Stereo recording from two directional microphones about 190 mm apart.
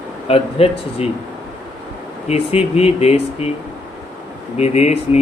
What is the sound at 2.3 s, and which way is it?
Speech, 35° left (ahead or behind).